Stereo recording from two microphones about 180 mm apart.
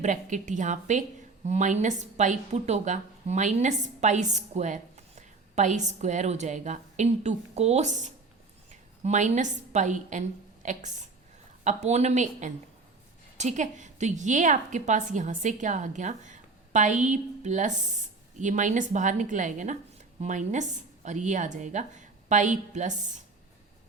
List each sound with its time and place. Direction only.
0.0 s a woman's voice: 45° right (ahead or behind)